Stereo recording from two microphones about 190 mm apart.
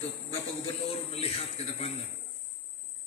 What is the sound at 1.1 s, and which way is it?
Speech, 30° left (ahead or behind).